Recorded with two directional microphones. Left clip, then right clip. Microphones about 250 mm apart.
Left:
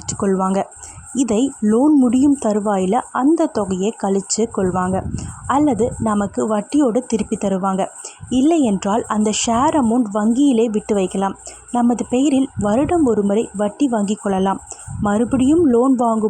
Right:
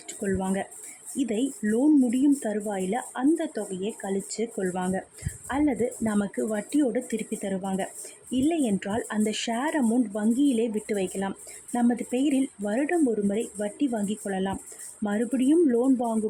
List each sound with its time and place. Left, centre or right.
0.3 s speech: centre